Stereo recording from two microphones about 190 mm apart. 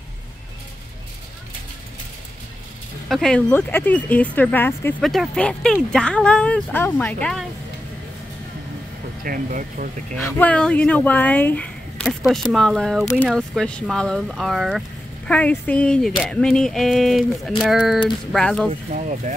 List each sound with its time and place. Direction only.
3.1 s speech: 5° left (ahead or behind)
9.2 s speech: 45° right (ahead or behind)
10.2 s speech: 10° left (ahead or behind)
13.0 s speech: 15° left (ahead or behind)
13.3 s speech: centre (ahead or behind)
18.9 s speech: 40° right (ahead or behind)